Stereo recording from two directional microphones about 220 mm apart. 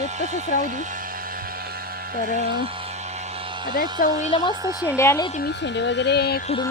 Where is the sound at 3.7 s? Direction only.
40° left (ahead or behind).